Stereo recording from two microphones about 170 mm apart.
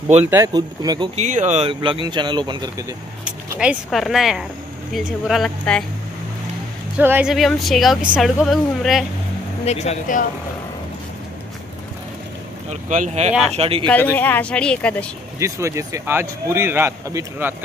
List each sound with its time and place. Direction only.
0.2 s speech: 15° right (ahead or behind)
0.5 s speech: 25° right (ahead or behind)
1.1 s speech: 45° right (ahead or behind); by 2.7 s 25° right (ahead or behind)
3.5 s speech: centre (ahead or behind)
7.0 s speech: 10° right (ahead or behind)
9.7 s speech: 40° left (ahead or behind)
12.6 s speech: 50° right (ahead or behind)
13.6 s speech: 35° right (ahead or behind)
14.1 s a woman's voice: 10° left (ahead or behind)
15.3 s speech: 15° right (ahead or behind)